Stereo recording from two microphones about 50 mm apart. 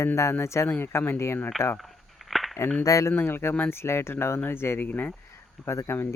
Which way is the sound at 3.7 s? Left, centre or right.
Left.